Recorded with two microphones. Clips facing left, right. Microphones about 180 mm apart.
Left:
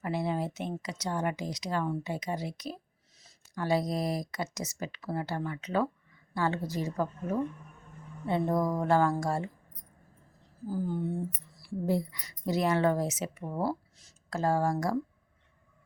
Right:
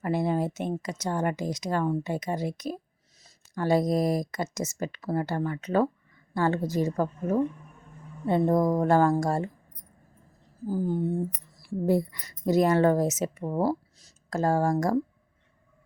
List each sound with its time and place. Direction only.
0.0 s a woman's voice: 45° right (ahead or behind)
11.7 s a woman's voice: 50° right (ahead or behind)